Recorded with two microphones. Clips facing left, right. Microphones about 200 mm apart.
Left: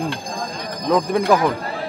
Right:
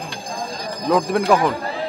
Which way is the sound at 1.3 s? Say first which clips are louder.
Even; centre (ahead or behind).